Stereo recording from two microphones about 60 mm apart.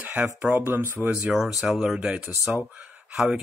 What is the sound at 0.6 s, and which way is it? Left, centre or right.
Speech, right.